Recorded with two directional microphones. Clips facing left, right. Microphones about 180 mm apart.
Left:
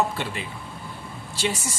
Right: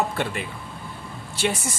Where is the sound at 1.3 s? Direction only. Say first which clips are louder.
Right 2 dB; 55° right (ahead or behind).